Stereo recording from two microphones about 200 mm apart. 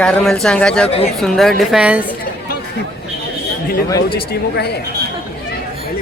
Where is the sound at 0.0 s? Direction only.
5° left (ahead or behind).